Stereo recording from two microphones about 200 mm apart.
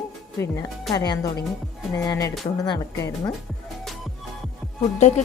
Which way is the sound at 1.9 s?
15° left (ahead or behind).